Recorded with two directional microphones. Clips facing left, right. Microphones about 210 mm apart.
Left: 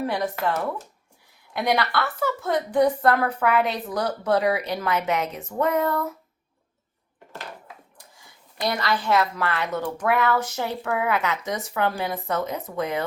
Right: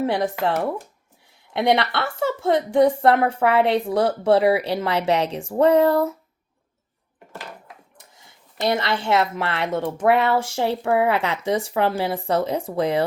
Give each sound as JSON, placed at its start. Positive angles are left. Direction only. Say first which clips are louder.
{"t": 0.0, "sound": "a woman's voice", "louder": "right 4 dB", "side_deg": -30}
{"t": 7.9, "sound": "a woman's voice", "louder": "even", "side_deg": -25}